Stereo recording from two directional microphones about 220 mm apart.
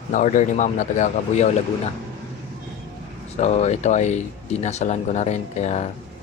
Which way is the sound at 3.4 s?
30° left (ahead or behind).